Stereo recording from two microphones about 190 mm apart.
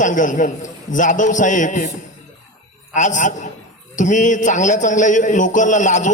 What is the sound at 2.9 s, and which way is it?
A man's voice, 40° left (ahead or behind).